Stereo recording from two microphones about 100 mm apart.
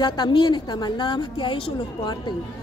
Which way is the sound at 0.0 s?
50° left (ahead or behind).